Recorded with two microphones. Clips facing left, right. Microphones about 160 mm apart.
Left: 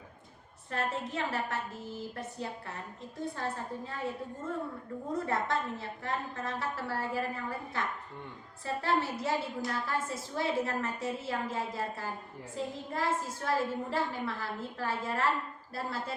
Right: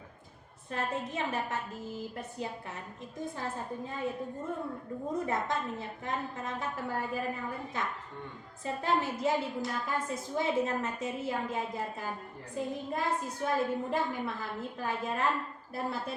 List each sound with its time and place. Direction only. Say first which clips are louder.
0.7 s a woman's voice: even; 15° right (ahead or behind)
8.6 s a woman's voice: even; 20° right (ahead or behind)